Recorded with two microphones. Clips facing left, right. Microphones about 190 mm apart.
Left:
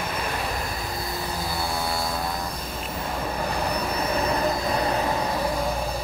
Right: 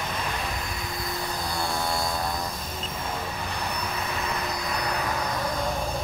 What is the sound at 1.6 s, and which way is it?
Aircraft, 5° left (ahead or behind).